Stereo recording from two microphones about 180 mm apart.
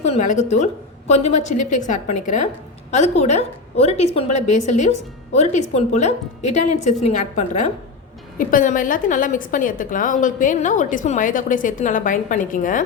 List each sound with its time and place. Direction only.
0.0 s a woman's voice: 40° left (ahead or behind)